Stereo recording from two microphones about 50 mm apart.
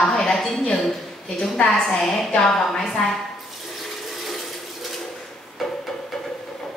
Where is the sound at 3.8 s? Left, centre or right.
Centre.